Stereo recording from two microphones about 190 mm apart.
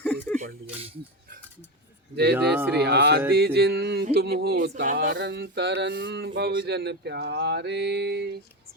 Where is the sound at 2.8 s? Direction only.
60° right (ahead or behind).